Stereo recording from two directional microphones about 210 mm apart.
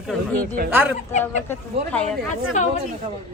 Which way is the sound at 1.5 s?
5° left (ahead or behind).